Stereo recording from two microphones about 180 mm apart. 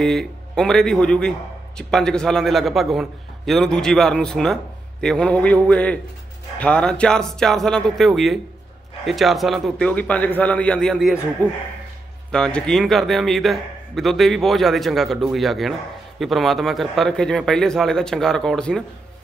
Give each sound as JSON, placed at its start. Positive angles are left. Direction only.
{"t": 0.0, "sound": "a man's voice", "side_deg": 0}